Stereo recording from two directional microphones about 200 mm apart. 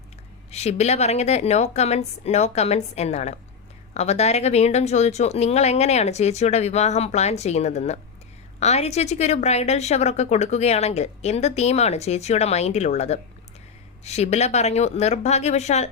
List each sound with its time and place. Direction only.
0.5 s a woman's voice: 35° left (ahead or behind)